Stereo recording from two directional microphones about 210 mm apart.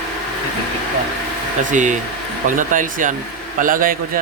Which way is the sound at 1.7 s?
35° right (ahead or behind).